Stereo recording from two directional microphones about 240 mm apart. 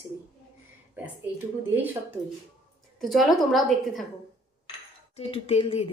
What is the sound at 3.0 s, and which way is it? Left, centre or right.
A woman's voice, centre.